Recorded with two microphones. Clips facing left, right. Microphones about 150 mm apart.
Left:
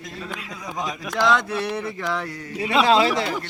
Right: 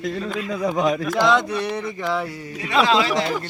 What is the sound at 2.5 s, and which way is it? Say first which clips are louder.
Mantra: left 1 dB; 25° left (ahead or behind).